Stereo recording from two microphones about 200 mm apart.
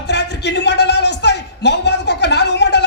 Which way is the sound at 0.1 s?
60° left (ahead or behind).